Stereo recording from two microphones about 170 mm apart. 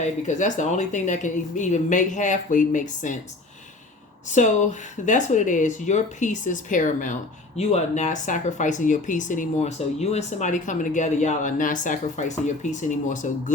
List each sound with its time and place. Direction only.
0.0 s speech: 45° left (ahead or behind)
4.3 s speech: 45° left (ahead or behind)